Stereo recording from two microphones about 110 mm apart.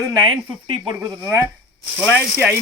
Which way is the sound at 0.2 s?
45° right (ahead or behind).